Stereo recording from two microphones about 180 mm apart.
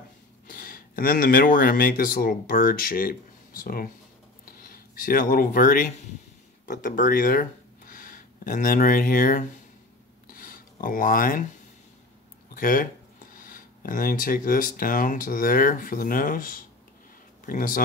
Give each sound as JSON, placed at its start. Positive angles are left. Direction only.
{"t": 0.5, "sound": "speech", "side_deg": 55}
{"t": 10.2, "sound": "rub", "side_deg": 50}
{"t": 12.5, "sound": "speech", "side_deg": 50}